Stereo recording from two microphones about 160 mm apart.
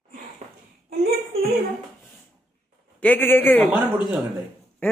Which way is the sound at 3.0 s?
10° left (ahead or behind).